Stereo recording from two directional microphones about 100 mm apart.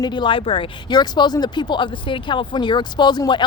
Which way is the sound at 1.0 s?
45° left (ahead or behind).